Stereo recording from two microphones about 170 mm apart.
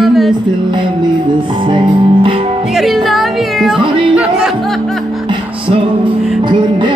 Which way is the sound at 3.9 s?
30° right (ahead or behind).